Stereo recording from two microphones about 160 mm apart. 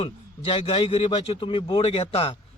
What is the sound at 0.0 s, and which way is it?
A man's voice, 35° left (ahead or behind).